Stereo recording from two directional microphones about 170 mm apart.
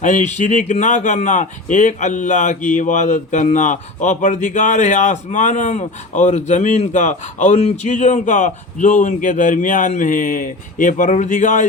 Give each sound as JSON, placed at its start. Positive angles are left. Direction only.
{"t": 0.0, "sound": "a man's voice", "side_deg": 45}